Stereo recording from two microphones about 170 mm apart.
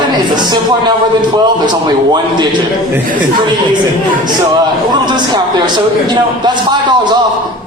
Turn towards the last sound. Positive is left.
turn(degrees=-25)  # may be behind; listen again after turning